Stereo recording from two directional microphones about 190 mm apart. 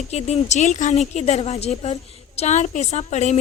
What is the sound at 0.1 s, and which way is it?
A woman's voice, 35° left (ahead or behind).